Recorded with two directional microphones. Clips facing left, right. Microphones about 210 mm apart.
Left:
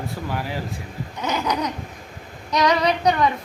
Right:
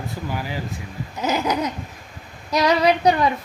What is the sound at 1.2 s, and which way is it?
Female singing, 25° right (ahead or behind).